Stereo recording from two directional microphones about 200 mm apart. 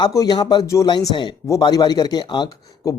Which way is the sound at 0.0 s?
20° left (ahead or behind).